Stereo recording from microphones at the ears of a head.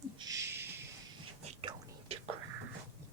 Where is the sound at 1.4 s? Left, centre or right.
Right.